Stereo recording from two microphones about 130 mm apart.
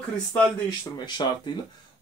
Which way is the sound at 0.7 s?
35° left (ahead or behind).